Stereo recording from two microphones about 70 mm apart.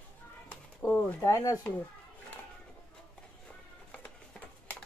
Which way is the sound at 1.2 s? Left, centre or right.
Left.